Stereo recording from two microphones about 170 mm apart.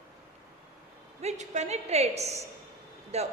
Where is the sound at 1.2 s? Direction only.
40° right (ahead or behind).